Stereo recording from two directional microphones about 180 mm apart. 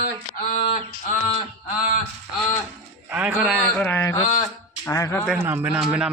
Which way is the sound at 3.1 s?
10° right (ahead or behind).